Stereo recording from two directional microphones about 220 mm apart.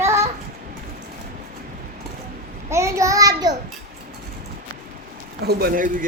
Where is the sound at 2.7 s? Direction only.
15° right (ahead or behind).